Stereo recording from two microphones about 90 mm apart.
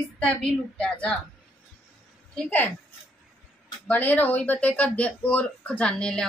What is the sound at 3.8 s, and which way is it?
Speech, 20° left (ahead or behind).